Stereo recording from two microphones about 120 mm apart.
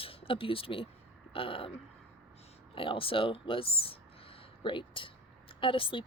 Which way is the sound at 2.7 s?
50° left (ahead or behind).